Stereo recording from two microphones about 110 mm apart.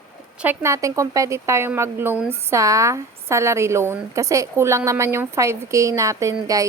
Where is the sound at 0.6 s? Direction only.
25° right (ahead or behind).